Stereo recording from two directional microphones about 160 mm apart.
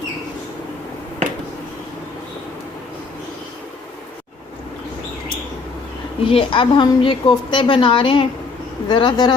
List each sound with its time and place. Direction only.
6.2 s a woman's voice: 35° left (ahead or behind)